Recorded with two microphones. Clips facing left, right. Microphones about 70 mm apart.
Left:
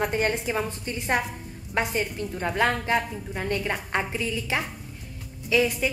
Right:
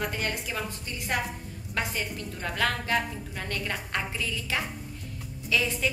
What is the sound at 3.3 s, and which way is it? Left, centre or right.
A woman's voice, left.